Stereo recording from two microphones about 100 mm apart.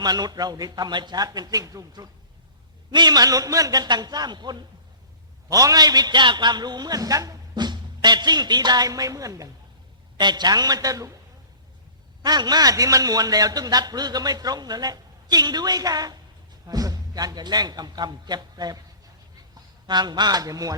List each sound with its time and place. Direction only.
0.0 s a man's voice: 40° right (ahead or behind)
5.5 s a man's voice: 35° right (ahead or behind)
10.2 s a man's voice: 45° right (ahead or behind)
12.2 s a man's voice: 45° right (ahead or behind)